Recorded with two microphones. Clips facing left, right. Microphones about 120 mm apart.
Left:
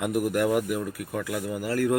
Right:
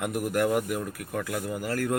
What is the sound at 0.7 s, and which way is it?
Speech, 5° left (ahead or behind).